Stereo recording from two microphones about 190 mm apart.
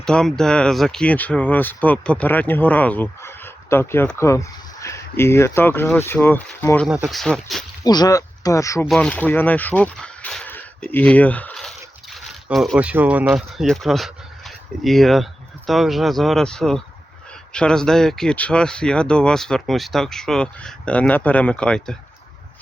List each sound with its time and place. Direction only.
0.0 s speech: 5° left (ahead or behind)
6.8 s speech: 5° right (ahead or behind)
7.9 s speech: 20° left (ahead or behind)
8.9 s speech: 5° left (ahead or behind)